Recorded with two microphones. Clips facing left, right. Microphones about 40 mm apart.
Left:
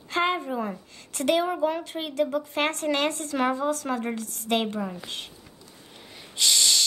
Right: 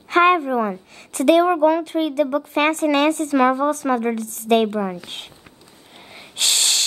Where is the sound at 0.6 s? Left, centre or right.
Right.